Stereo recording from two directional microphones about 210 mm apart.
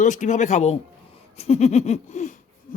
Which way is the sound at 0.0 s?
35° left (ahead or behind).